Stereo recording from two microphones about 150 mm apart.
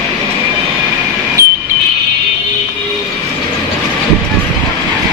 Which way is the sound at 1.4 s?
20° right (ahead or behind).